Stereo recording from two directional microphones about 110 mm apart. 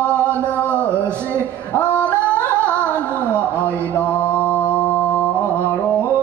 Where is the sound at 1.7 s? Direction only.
15° left (ahead or behind).